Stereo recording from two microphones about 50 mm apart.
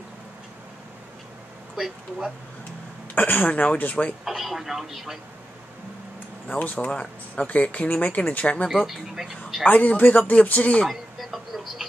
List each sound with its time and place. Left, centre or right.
1.8 s speech: centre
3.2 s speech: left
4.2 s speech: centre
6.5 s speech: left
8.6 s speech: centre
9.7 s speech: left
10.9 s a sound: centre